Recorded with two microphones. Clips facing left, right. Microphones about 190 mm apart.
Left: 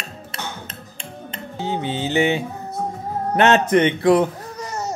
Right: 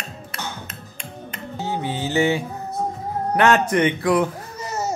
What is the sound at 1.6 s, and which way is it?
Music, 20° left (ahead or behind).